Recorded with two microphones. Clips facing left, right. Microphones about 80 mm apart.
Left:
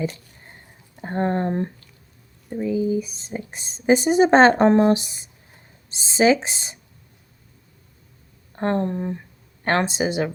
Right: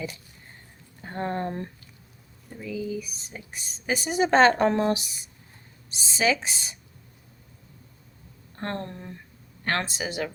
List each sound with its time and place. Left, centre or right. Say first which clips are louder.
1.0 s speech: left 7 dB; left
8.5 s speech: left 10 dB; left